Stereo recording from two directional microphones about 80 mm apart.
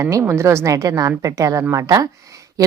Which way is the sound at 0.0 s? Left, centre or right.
Right.